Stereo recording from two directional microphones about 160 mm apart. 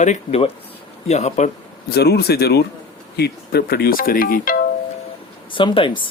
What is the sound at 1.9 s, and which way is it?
Speech, 90° left.